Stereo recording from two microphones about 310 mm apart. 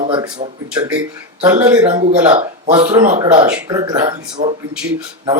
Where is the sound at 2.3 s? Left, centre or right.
Right.